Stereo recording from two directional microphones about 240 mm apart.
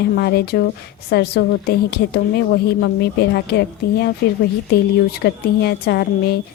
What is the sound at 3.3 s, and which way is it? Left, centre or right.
Speech, left.